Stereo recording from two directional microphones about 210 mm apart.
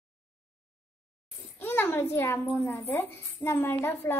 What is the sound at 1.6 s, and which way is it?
A child's voice, 10° left (ahead or behind).